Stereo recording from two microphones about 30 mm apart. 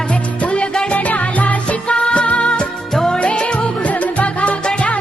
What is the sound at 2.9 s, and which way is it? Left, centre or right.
Music, centre.